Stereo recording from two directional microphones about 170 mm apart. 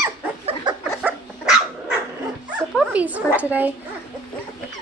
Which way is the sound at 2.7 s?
10° right (ahead or behind).